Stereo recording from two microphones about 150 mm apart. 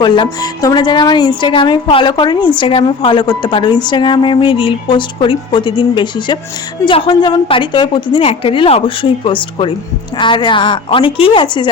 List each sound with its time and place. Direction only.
0.0 s a woman's voice: 30° left (ahead or behind)